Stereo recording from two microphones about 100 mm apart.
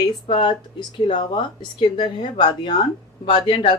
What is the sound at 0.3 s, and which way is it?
A woman's voice, 55° left (ahead or behind).